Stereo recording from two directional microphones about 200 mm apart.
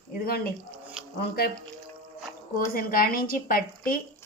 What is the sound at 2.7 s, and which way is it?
A woman's voice, 45° left (ahead or behind).